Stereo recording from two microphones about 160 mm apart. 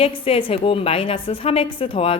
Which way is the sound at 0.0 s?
35° left (ahead or behind).